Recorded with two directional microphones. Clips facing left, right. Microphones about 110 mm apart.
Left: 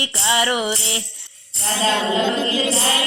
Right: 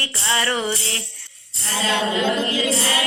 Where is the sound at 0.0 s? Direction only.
15° left (ahead or behind).